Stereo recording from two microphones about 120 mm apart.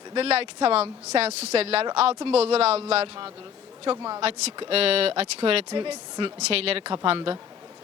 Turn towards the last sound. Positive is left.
turn(degrees=-45)  # may be behind; listen again after turning